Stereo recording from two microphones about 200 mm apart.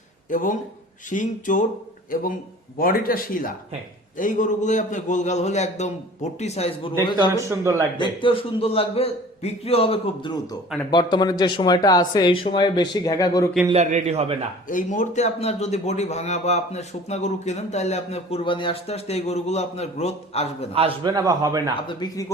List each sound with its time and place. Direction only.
0.3 s a man's voice: 40° left (ahead or behind)
7.2 s speech: 15° right (ahead or behind)
7.9 s speech: 25° left (ahead or behind)
13.7 s a man's voice: 30° right (ahead or behind)
14.7 s a man's voice: 40° left (ahead or behind)
20.7 s a man's voice: 25° right (ahead or behind)
21.8 s speech: 20° left (ahead or behind)